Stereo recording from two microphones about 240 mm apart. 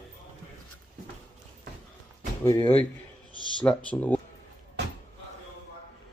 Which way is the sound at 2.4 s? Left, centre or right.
Centre.